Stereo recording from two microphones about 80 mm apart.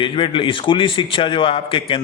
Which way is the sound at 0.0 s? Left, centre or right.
Left.